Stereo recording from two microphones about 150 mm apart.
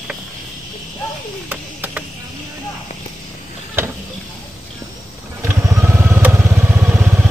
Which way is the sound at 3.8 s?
15° right (ahead or behind).